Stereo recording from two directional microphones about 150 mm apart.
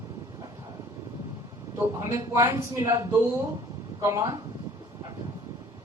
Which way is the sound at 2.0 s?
20° right (ahead or behind).